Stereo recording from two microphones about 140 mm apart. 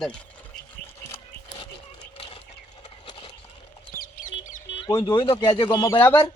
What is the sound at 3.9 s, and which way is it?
Chicken, 85° left.